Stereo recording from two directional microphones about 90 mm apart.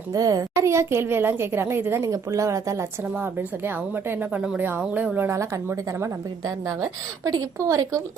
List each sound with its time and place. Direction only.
0.1 s a woman's voice: 40° right (ahead or behind)
3.2 s speech: 25° right (ahead or behind)
5.3 s a woman's voice: 35° right (ahead or behind)